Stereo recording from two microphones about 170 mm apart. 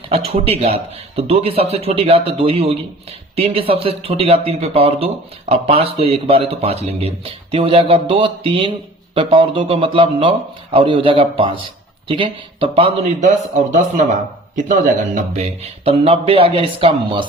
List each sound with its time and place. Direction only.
0.1 s speech: 35° right (ahead or behind)